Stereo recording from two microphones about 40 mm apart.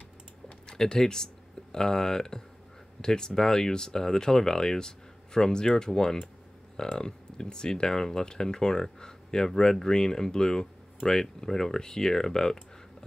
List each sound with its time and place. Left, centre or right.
0.7 s speech: centre